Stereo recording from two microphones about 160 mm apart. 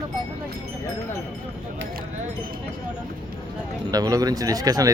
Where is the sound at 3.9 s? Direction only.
25° right (ahead or behind).